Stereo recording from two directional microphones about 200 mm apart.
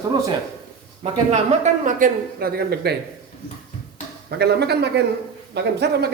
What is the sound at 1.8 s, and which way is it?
A woman's voice, 45° right (ahead or behind).